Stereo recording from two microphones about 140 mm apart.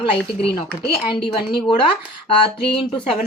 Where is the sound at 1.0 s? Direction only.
35° left (ahead or behind).